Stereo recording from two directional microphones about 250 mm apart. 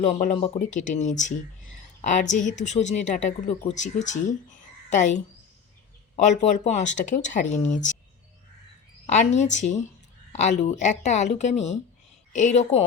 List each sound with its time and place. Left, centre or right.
0.0 s a woman's voice: left
9.0 s a woman's voice: left